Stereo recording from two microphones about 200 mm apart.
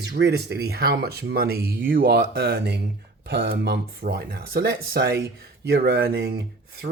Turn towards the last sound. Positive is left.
turn(degrees=-55)  # may be behind; listen again after turning